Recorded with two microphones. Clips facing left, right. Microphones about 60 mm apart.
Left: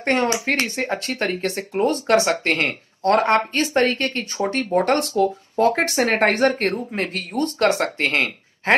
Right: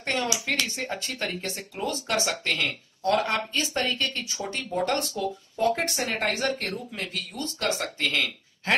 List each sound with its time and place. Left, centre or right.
0.0 s speech: left